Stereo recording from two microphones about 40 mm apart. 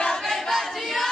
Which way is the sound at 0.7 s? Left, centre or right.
Centre.